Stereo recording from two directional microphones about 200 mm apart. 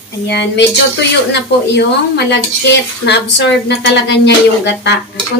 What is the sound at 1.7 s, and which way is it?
Speech, 55° left (ahead or behind).